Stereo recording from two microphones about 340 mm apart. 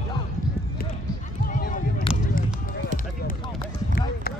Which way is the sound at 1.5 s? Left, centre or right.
Left.